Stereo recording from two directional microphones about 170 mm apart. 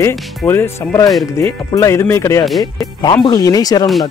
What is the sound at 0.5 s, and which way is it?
Speech, 15° left (ahead or behind).